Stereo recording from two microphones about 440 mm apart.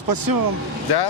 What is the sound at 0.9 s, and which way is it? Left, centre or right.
Speech, left.